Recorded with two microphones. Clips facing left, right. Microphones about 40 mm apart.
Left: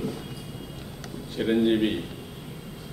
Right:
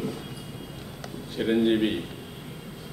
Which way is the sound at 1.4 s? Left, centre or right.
Centre.